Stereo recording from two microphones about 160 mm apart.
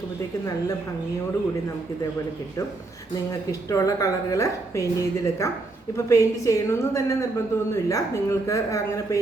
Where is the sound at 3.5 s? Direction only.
20° left (ahead or behind).